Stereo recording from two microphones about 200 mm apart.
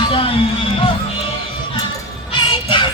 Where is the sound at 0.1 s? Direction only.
25° left (ahead or behind).